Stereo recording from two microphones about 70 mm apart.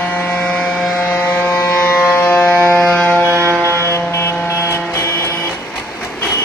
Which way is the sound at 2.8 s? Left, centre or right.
Centre.